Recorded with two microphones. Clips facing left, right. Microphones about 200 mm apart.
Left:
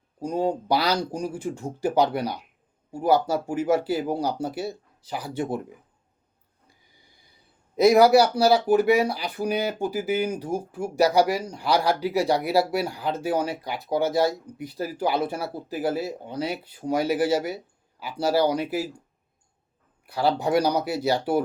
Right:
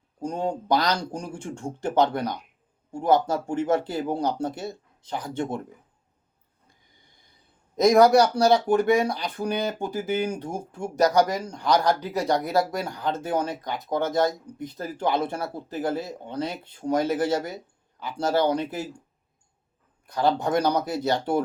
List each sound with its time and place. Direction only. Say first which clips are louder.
0.2 s speech: left 3 dB; 5° left (ahead or behind)
7.8 s speech: left 1 dB; 5° left (ahead or behind)
20.1 s speech: even; 5° left (ahead or behind)